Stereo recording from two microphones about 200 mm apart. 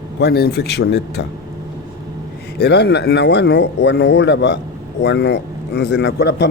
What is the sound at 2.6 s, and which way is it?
Speech, 55° left (ahead or behind).